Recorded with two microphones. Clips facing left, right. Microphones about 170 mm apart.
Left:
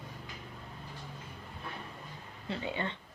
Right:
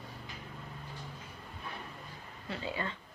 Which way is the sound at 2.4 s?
25° left (ahead or behind).